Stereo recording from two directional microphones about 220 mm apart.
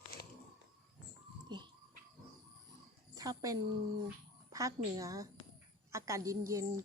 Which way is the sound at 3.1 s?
15° right (ahead or behind).